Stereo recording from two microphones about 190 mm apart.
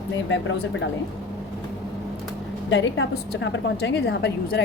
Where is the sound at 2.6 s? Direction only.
75° left (ahead or behind); by 4.6 s 60° left (ahead or behind).